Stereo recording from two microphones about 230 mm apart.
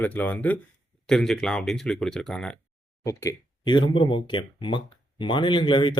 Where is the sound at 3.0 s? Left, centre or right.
Centre.